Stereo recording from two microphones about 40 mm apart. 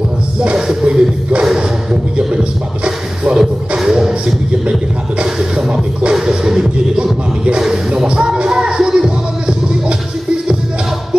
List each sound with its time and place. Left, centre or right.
0.8 s music: right
5.2 s a sound: centre
6.1 s music: centre